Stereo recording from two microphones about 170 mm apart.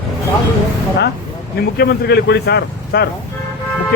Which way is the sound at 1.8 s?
70° left (ahead or behind).